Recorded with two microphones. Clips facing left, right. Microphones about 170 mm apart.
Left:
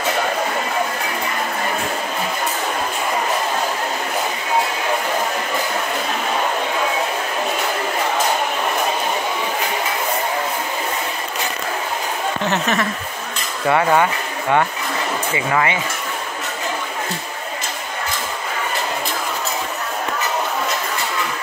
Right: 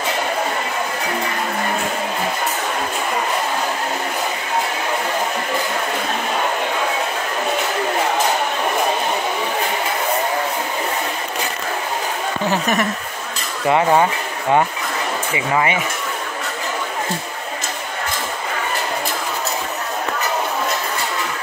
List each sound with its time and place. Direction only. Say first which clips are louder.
12.4 s chuckle: right 2 dB; 15° right (ahead or behind)
13.7 s speech: right 1 dB; 20° right (ahead or behind)
15.3 s speech: right 1 dB; 20° right (ahead or behind)